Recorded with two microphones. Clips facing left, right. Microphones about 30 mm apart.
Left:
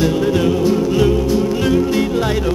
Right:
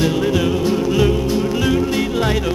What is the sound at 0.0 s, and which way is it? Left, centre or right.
Music, centre.